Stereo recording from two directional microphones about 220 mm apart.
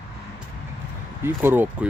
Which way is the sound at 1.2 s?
10° right (ahead or behind).